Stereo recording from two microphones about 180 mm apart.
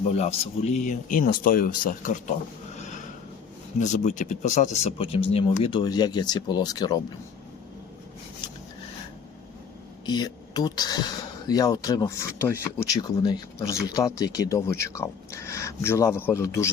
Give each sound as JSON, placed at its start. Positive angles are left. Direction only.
{"t": 0.1, "sound": "speech", "side_deg": 35}
{"t": 2.7, "sound": "a sound", "side_deg": 40}
{"t": 3.8, "sound": "speech", "side_deg": 40}
{"t": 10.1, "sound": "speech", "side_deg": 20}